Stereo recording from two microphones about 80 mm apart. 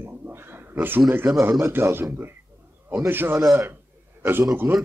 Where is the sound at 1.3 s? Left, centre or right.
Right.